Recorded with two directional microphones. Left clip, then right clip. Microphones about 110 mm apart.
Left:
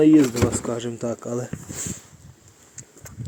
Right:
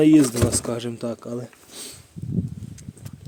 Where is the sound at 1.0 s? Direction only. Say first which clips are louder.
Left 2 dB; 10° right (ahead or behind).